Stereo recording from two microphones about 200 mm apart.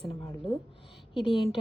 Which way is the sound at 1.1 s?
25° left (ahead or behind).